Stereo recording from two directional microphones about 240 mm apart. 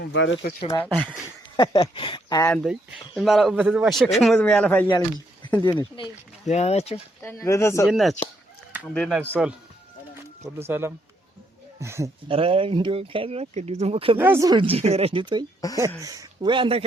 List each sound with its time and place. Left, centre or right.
0.0 s speech: left
0.9 s a man's voice: centre
1.5 s speech: centre
3.2 s a man's voice: centre
6.0 s speech: left
7.2 s speech: centre
7.9 s a man's voice: centre
10.7 s speech: centre
12.3 s speech: right
14.2 s speech: centre